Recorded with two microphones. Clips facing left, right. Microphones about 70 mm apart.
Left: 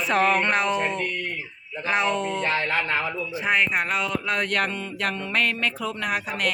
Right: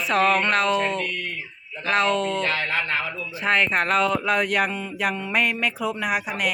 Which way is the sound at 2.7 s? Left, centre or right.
Centre.